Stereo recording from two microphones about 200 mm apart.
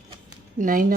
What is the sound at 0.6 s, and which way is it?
Speech, 45° right (ahead or behind).